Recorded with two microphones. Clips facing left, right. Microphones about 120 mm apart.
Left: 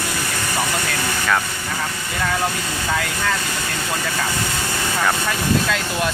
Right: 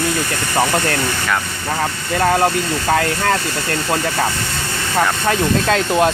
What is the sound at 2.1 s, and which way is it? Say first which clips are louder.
Speech: right 8 dB; 55° right (ahead or behind).